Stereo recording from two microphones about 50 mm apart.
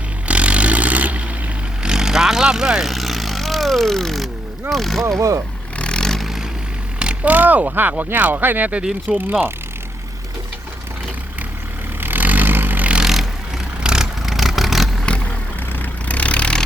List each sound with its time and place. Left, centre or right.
0.3 s vehicle: right
1.8 s vehicle: centre
4.7 s speech: centre
5.8 s vehicle: centre
7.3 s speech: right
11.9 s vehicle: right
13.0 s vehicle: centre
15.0 s vehicle: left